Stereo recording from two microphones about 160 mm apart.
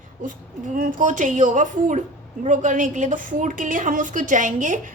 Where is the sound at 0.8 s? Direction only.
55° right (ahead or behind).